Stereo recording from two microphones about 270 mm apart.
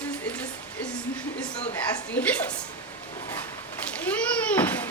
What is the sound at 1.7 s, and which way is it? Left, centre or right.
Speech, centre.